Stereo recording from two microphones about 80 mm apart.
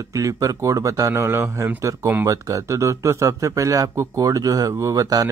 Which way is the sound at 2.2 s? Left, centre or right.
Right.